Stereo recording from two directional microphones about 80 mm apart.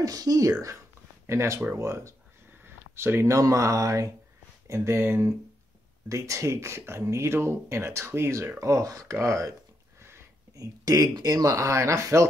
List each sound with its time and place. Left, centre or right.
0.0 s speech: right
1.2 s speech: right
4.6 s speech: right
6.0 s speech: right
10.5 s speech: right